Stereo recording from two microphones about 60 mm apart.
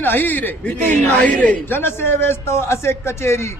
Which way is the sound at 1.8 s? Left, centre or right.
Left.